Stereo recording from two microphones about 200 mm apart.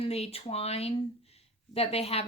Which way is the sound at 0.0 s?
30° left (ahead or behind).